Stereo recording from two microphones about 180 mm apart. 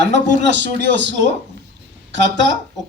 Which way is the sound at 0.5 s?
80° right.